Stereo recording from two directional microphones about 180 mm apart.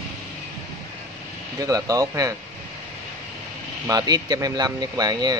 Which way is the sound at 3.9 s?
20° right (ahead or behind).